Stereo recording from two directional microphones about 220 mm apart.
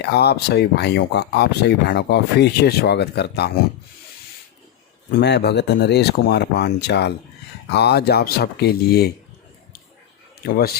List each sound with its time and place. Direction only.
0.0 s speech: 50° left (ahead or behind)
5.1 s speech: 50° left (ahead or behind)
10.4 s speech: 45° left (ahead or behind)